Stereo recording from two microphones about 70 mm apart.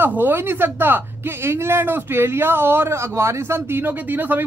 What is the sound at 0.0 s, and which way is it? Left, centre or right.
A woman's voice, right.